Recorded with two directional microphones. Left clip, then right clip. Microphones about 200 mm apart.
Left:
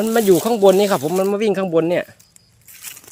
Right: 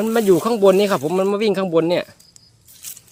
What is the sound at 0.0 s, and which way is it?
Speech, 5° left (ahead or behind).